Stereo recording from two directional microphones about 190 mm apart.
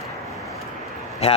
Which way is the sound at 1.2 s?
35° left (ahead or behind).